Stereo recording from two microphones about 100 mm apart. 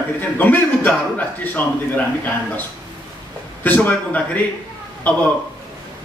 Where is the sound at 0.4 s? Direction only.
15° left (ahead or behind).